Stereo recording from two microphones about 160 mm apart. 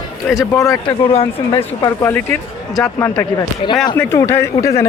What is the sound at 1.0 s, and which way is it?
Speech, 35° left (ahead or behind).